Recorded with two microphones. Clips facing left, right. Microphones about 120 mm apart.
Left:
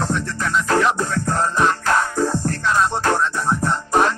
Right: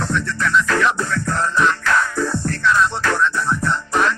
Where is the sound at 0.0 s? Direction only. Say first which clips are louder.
Right 1 dB; 40° left (ahead or behind).